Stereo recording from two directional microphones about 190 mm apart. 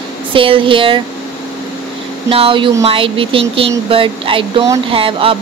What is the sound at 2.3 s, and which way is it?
Speech, 25° right (ahead or behind).